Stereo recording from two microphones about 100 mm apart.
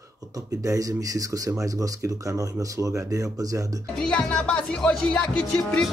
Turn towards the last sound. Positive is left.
turn(degrees=10)  # may be behind; listen again after turning